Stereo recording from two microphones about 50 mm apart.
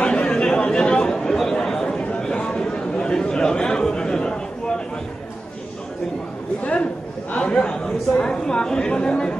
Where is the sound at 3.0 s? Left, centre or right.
Centre.